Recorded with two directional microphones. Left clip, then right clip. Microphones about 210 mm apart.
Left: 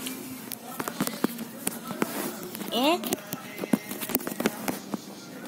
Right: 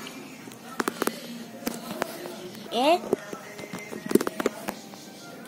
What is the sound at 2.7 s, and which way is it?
Speech, 15° right (ahead or behind).